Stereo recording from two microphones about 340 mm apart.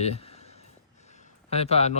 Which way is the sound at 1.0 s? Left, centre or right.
Centre.